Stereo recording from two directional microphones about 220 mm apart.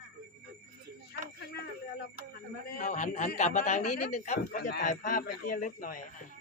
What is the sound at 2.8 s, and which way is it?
A man's voice, 35° left (ahead or behind).